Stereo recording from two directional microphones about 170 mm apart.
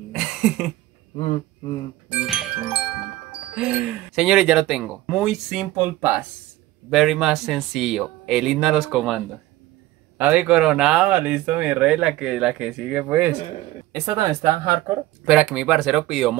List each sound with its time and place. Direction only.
0.1 s throat clearing: 5° right (ahead or behind)
1.1 s speech: 35° left (ahead or behind)
2.0 s music: 5° right (ahead or behind)
3.5 s speech: 5° right (ahead or behind)
15.2 s speech: 5° right (ahead or behind)